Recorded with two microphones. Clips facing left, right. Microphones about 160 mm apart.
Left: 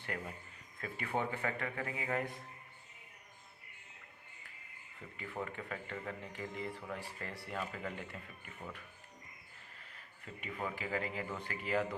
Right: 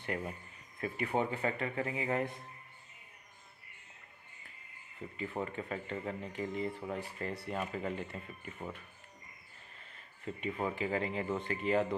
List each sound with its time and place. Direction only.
0.1 s speech: 20° right (ahead or behind)
5.1 s speech: 25° right (ahead or behind)
10.4 s speech: 25° right (ahead or behind)